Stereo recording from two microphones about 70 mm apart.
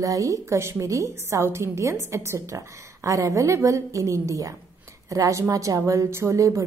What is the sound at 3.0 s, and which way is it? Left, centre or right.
A woman's voice, right.